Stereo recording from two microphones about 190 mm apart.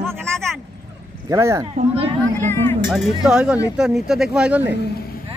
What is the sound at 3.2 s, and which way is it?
Speech, 5° right (ahead or behind).